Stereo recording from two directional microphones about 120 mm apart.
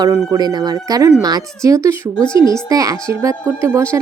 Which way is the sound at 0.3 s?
35° right (ahead or behind).